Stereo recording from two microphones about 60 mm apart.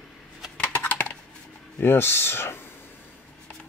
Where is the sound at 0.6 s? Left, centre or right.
Left.